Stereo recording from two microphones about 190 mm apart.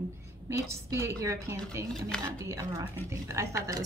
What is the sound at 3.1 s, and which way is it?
Speech, 15° right (ahead or behind).